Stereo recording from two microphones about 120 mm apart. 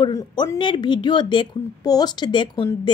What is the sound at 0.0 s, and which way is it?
A woman's voice, 35° left (ahead or behind).